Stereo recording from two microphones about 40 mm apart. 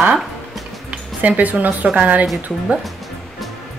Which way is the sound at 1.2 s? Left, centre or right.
Right.